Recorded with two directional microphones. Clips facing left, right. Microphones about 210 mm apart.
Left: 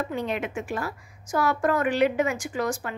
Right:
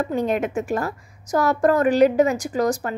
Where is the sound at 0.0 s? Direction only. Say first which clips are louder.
Right 6 dB; 45° right (ahead or behind).